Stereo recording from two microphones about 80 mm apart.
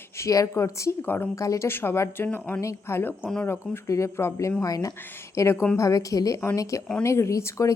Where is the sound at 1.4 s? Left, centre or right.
Left.